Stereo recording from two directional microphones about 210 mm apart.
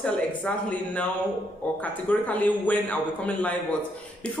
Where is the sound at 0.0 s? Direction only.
5° left (ahead or behind).